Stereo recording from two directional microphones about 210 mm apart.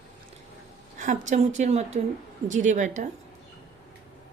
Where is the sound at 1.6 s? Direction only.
30° right (ahead or behind).